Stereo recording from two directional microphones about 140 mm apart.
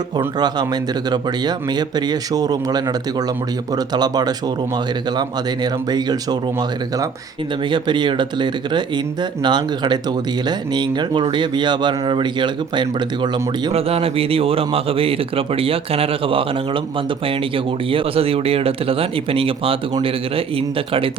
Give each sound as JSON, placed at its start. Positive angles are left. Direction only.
{"t": 0.3, "sound": "speech", "side_deg": -30}
{"t": 7.7, "sound": "speech", "side_deg": -35}
{"t": 13.7, "sound": "a man's voice", "side_deg": -45}
{"t": 17.9, "sound": "speech", "side_deg": -45}